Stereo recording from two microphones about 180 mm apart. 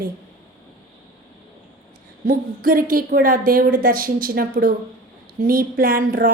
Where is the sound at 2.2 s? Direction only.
50° right (ahead or behind).